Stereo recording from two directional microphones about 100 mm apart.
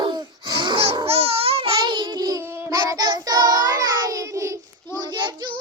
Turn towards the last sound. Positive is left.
turn(degrees=-45)  # may be behind; listen again after turning